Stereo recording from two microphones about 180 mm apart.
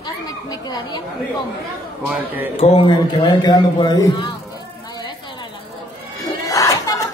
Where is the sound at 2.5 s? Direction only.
35° left (ahead or behind).